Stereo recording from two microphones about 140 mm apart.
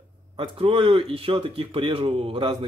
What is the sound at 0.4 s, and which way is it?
Speech, 40° right (ahead or behind).